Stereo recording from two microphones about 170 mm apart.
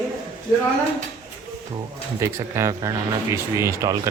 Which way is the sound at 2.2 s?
15° right (ahead or behind).